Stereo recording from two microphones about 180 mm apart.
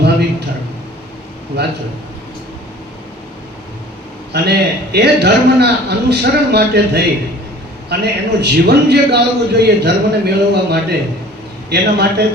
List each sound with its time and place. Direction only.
0.0 s a sound: 65° right (ahead or behind)
1.5 s a man's voice: 65° right (ahead or behind)
4.3 s a man's voice: 65° right (ahead or behind)